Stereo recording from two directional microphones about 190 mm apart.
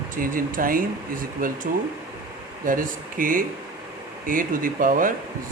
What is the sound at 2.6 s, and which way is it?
Speech, 45° right (ahead or behind).